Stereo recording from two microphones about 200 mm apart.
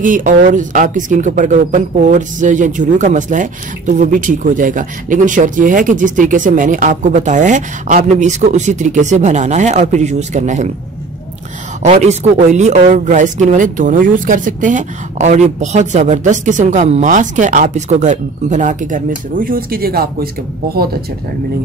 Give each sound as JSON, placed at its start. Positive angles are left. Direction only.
{"t": 0.0, "sound": "speech", "side_deg": -40}
{"t": 11.8, "sound": "speech", "side_deg": -35}